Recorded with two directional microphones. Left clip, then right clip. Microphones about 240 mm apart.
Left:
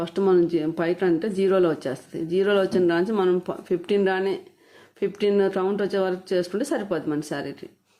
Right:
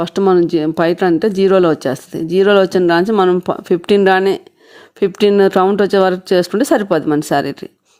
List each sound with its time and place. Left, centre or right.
0.0 s speech: right